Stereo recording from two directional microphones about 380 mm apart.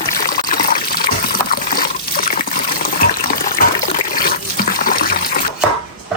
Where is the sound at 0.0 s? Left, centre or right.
Left.